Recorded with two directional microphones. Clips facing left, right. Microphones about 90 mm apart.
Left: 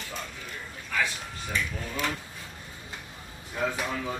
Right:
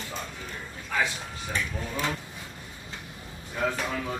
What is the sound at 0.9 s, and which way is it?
Speech, 25° right (ahead or behind).